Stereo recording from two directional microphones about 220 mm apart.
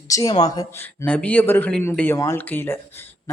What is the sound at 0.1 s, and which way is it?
Speech, 15° left (ahead or behind).